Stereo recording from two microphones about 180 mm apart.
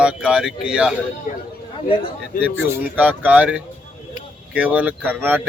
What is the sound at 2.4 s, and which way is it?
Speech, 10° right (ahead or behind).